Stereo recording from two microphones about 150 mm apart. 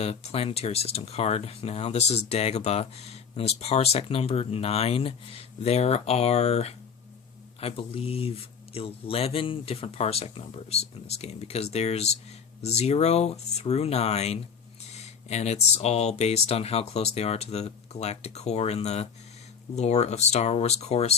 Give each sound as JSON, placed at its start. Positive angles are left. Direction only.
{"t": 0.0, "sound": "speech", "side_deg": 45}